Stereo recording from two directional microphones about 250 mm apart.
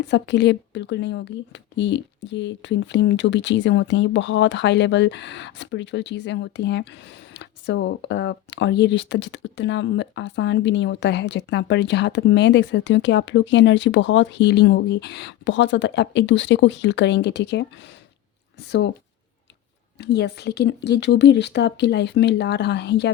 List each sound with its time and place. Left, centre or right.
0.0 s speech: left
20.0 s speech: left